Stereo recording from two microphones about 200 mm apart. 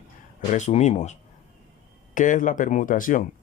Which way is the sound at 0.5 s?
35° left (ahead or behind).